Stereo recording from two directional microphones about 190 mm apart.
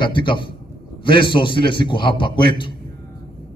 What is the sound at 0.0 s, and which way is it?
A man's voice, 25° left (ahead or behind).